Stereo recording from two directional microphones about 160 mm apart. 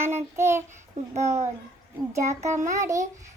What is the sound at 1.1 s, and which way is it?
Speech, 45° right (ahead or behind).